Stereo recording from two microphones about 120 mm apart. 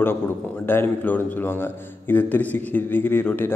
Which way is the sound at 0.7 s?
15° left (ahead or behind).